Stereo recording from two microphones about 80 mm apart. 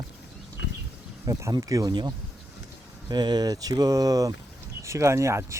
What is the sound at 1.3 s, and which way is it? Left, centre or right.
Speech, right.